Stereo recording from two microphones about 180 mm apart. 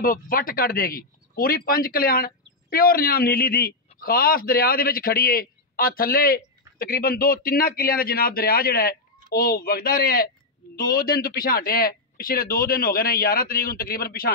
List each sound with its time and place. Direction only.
0.0 s a man's voice: 50° left (ahead or behind)